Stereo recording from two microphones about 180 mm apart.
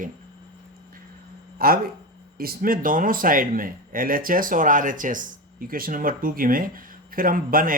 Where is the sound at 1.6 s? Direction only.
55° right (ahead or behind).